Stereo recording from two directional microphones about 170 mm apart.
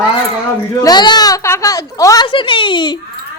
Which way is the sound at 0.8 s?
25° left (ahead or behind).